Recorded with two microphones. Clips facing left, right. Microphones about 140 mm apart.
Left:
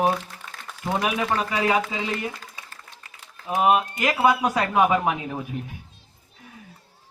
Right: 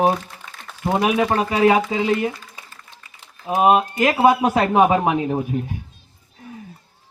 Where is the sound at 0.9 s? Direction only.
25° right (ahead or behind).